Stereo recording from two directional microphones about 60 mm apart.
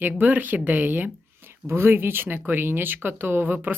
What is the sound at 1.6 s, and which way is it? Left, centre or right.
Speech, right.